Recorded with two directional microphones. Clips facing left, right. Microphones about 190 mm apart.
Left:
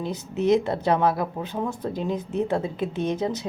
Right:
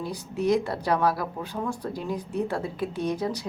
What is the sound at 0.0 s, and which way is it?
Speech, 20° left (ahead or behind).